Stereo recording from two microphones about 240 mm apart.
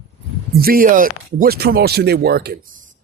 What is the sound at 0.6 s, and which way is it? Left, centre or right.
Speech, right.